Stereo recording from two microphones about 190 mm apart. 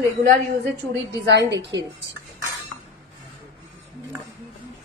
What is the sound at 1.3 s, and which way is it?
Speech, 65° right (ahead or behind).